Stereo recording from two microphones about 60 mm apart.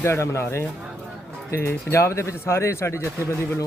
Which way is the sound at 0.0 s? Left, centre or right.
Left.